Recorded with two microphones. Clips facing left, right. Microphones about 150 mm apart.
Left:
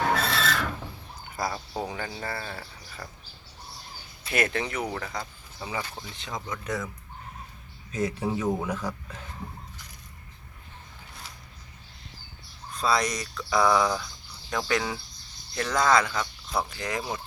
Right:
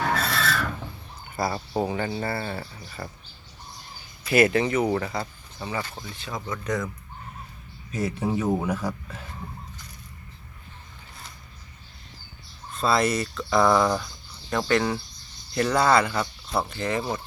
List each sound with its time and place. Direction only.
0.3 s filing: 20° left (ahead or behind)
1.4 s speech: centre (ahead or behind)
4.3 s speech: 5° right (ahead or behind)
5.6 s speech: 10° left (ahead or behind)
7.9 s speech: 5° right (ahead or behind)
12.7 s speech: centre (ahead or behind)